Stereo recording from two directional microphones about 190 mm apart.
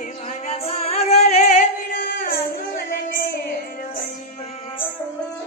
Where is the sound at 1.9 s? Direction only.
45° left (ahead or behind).